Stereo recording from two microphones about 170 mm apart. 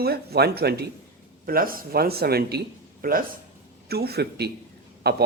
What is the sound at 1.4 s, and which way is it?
A man's voice, 55° right (ahead or behind).